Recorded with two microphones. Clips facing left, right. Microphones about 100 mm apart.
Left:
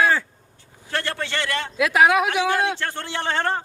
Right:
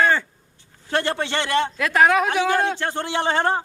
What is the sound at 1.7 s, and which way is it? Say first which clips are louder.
Speech: left 2 dB; 5° left (ahead or behind).